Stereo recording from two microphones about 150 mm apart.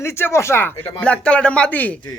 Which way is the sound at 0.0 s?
15° left (ahead or behind).